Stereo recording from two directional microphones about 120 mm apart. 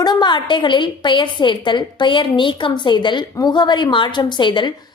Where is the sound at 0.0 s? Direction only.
35° left (ahead or behind).